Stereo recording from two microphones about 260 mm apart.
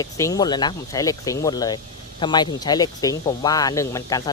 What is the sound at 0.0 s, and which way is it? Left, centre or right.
Speech, centre.